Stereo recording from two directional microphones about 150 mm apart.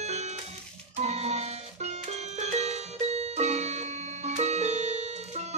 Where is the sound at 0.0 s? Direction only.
50° right (ahead or behind).